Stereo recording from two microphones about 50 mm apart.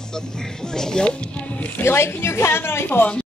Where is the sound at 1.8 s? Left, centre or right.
Left.